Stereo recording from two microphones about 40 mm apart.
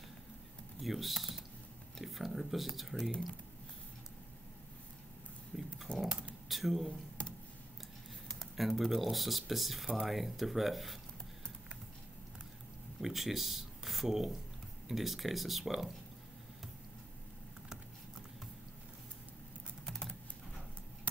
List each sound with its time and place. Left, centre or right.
0.8 s speech: centre
5.5 s a sound: centre
5.9 s a sound: left
6.5 s speech: centre
6.9 s computer keyboard: left
8.4 s speech: centre
13.0 s speech: centre
19.9 s typing: centre